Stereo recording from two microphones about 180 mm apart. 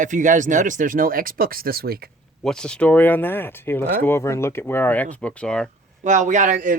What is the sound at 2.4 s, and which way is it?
Speech, 5° left (ahead or behind).